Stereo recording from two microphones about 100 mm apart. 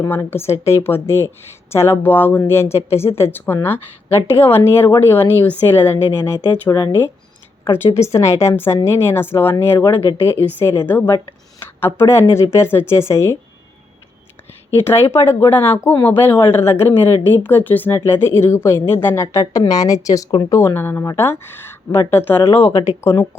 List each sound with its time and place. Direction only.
0.0 s speech: 25° left (ahead or behind)
4.3 s a woman's voice: 75° left (ahead or behind)
4.5 s speech: 20° left (ahead or behind); by 6.9 s 35° left (ahead or behind)
7.9 s speech: 30° left (ahead or behind)
14.8 s speech: 25° left (ahead or behind)